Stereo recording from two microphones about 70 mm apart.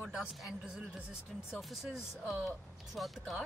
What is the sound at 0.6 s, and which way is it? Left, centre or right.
Speech, centre.